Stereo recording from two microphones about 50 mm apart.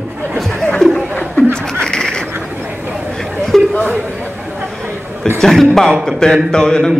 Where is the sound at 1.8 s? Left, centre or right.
Centre.